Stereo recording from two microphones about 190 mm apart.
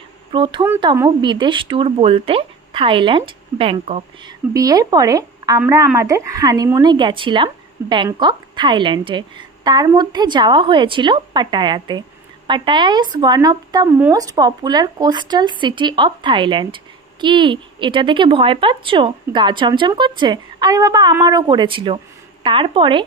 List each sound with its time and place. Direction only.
0.3 s speech: 25° right (ahead or behind)
4.6 s a woman's voice: 20° right (ahead or behind)